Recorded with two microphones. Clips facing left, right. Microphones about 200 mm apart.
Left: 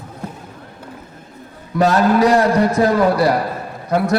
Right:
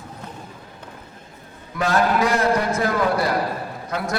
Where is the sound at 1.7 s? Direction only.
35° left (ahead or behind).